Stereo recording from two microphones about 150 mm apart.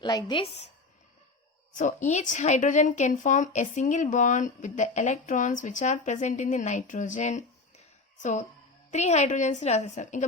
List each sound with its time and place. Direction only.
0.0 s a woman's voice: 25° left (ahead or behind)
1.7 s a woman's voice: 55° left (ahead or behind)